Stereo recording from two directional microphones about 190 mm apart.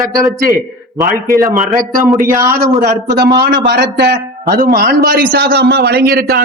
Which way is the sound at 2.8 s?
55° right (ahead or behind).